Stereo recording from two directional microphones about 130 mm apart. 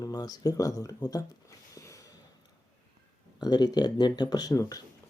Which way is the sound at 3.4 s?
30° left (ahead or behind).